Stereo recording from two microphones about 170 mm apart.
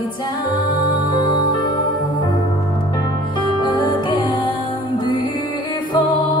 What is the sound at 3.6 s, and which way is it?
Music, 30° left (ahead or behind).